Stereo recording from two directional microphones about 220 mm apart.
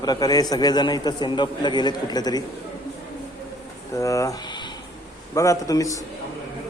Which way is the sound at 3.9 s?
15° left (ahead or behind).